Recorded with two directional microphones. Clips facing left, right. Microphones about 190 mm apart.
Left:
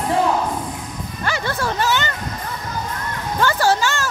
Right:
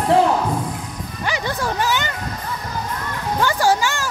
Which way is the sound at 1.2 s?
15° right (ahead or behind).